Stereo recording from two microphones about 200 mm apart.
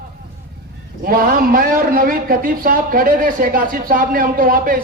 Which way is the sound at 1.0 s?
45° right (ahead or behind).